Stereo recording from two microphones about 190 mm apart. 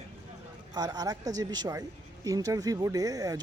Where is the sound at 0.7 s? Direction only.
20° right (ahead or behind).